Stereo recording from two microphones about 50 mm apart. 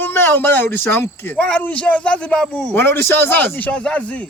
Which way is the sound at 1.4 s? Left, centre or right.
Left.